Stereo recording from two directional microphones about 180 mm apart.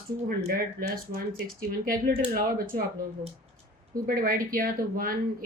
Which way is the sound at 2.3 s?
50° right (ahead or behind).